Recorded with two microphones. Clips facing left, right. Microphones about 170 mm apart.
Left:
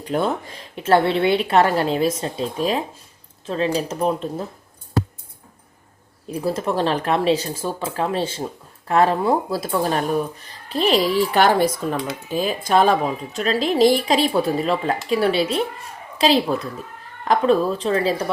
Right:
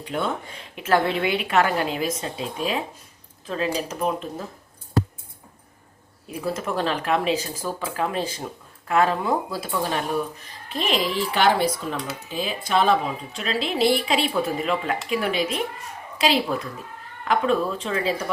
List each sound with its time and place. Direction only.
0.0 s speech: 40° left (ahead or behind)
6.4 s speech: 35° left (ahead or behind)